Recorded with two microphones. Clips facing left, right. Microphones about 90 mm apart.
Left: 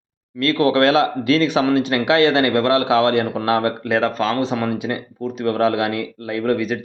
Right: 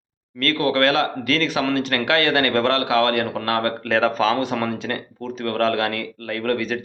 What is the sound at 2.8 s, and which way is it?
Speech, 25° left (ahead or behind).